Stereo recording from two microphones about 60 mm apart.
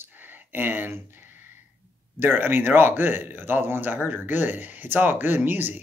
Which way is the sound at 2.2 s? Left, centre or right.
Right.